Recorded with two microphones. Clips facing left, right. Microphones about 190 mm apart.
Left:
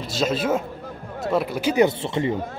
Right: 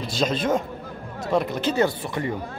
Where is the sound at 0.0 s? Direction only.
Centre (ahead or behind).